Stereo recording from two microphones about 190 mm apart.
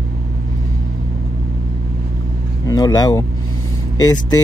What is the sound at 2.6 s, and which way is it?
Speech, 20° left (ahead or behind).